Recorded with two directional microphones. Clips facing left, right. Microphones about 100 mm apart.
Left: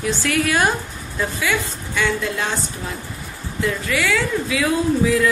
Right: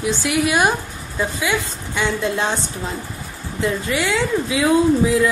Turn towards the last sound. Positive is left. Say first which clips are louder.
# right 3 dB
turn(degrees=-20)  # may be behind; listen again after turning